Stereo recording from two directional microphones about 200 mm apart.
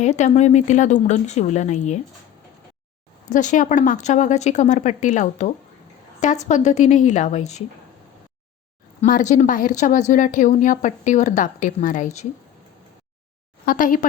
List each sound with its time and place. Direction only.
0.0 s a woman's voice: 35° left (ahead or behind)
3.2 s a woman's voice: 40° left (ahead or behind)
9.0 s a woman's voice: 40° left (ahead or behind)
13.7 s a woman's voice: 45° left (ahead or behind)